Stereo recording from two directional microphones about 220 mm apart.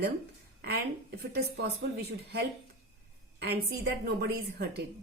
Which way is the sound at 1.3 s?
45° right (ahead or behind).